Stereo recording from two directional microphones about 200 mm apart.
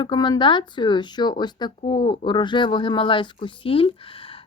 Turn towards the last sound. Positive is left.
turn(degrees=25)  # may be behind; listen again after turning